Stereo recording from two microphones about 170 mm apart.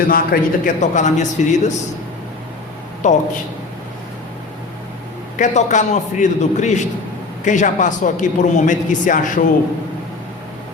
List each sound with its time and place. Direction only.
0.1 s a man's voice: 55° left (ahead or behind)
3.0 s a man's voice: 45° left (ahead or behind)
5.4 s a man's voice: 45° left (ahead or behind)